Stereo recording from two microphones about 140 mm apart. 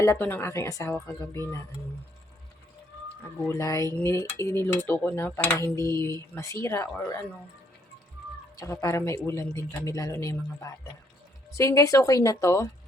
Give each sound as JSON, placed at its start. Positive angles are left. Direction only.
{"t": 0.0, "sound": "dishes", "side_deg": 20}
{"t": 3.4, "sound": "dishes", "side_deg": 20}
{"t": 8.5, "sound": "dishes", "side_deg": 25}